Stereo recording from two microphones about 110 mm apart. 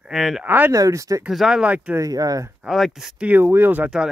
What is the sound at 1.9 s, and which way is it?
Speech, 35° right (ahead or behind).